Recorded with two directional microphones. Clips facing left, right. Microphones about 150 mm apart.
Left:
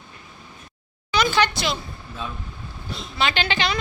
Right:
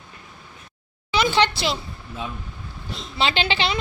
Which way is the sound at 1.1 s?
25° right (ahead or behind).